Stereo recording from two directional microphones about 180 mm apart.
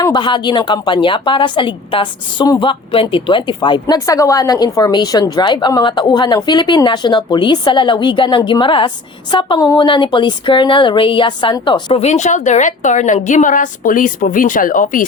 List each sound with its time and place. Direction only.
0.0 s a woman's voice: 25° left (ahead or behind)
12.0 s a woman's voice: 40° left (ahead or behind)